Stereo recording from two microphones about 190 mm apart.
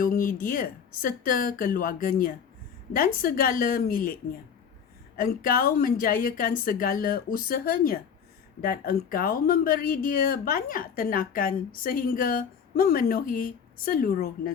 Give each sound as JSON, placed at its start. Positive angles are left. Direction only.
{"t": 0.0, "sound": "speech", "side_deg": 45}